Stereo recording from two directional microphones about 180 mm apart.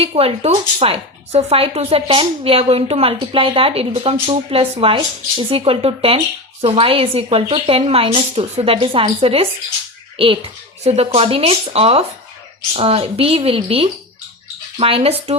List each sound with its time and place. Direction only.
0.0 s a woman's voice: 35° right (ahead or behind)
10.8 s a woman's voice: 35° right (ahead or behind)